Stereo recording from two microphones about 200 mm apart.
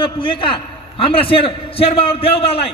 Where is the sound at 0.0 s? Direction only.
25° left (ahead or behind).